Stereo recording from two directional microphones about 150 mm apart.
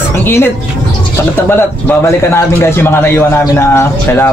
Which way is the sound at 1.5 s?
15° left (ahead or behind).